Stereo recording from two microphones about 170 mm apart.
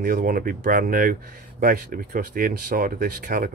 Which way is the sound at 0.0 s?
55° right (ahead or behind).